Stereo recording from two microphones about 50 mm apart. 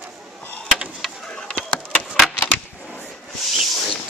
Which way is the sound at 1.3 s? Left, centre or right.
Centre.